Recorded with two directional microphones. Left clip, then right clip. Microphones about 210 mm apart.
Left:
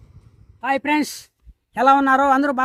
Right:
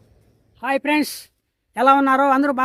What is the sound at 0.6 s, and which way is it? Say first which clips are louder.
Speech: even; centre (ahead or behind).